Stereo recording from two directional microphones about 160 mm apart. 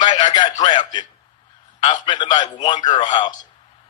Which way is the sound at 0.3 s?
30° left (ahead or behind).